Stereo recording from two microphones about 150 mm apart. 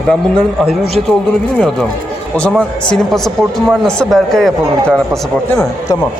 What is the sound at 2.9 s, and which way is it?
Speech, centre (ahead or behind).